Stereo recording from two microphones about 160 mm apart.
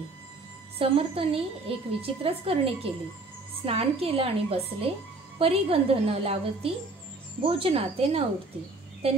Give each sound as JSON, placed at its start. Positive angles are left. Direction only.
{"t": 0.7, "sound": "a woman's voice", "side_deg": -35}